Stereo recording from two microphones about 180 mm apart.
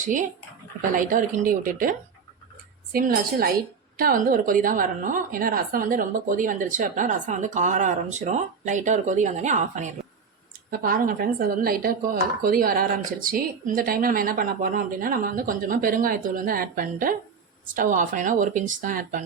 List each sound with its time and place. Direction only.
0.8 s a woman's voice: 50° right (ahead or behind)
10.7 s a woman's voice: 50° right (ahead or behind)